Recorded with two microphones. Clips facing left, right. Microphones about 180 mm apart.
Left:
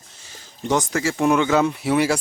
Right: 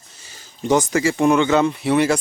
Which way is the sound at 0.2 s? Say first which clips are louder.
Right 3 dB; centre (ahead or behind).